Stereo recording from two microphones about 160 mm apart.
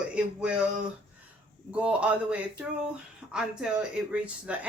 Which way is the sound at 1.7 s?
10° right (ahead or behind).